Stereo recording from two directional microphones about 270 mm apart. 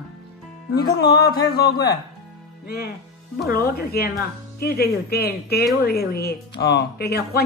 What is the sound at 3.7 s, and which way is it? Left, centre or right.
A woman's voice, left.